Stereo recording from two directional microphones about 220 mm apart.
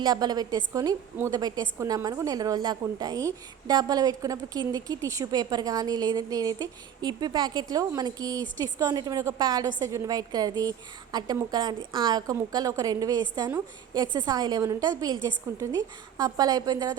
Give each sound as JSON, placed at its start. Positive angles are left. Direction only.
{"t": 0.0, "sound": "a woman's voice", "side_deg": -20}